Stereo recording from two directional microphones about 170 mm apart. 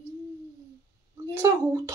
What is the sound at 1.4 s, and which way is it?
Speech, 15° right (ahead or behind).